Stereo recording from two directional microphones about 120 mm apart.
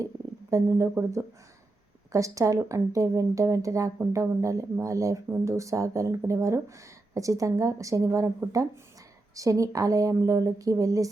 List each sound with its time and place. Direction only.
0.5 s speech: 25° right (ahead or behind)